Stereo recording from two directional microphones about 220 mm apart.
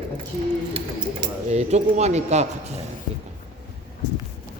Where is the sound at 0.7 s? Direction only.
30° right (ahead or behind).